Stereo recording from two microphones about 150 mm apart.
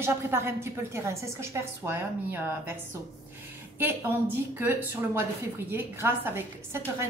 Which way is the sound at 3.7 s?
15° right (ahead or behind).